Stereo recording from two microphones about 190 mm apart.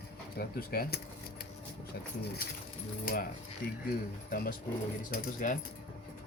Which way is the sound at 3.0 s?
45° left (ahead or behind).